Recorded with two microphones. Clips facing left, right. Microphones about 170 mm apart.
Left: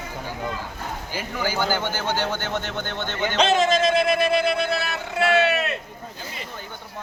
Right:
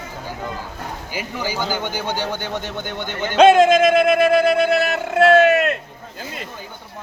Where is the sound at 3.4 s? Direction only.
55° right (ahead or behind).